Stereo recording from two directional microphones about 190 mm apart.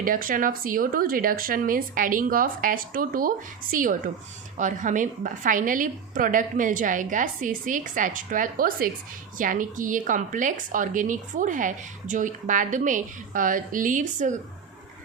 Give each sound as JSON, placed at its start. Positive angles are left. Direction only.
{"t": 0.0, "sound": "a woman's voice", "side_deg": -45}